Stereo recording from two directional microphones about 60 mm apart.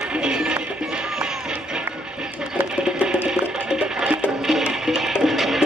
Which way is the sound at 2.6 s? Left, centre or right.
Centre.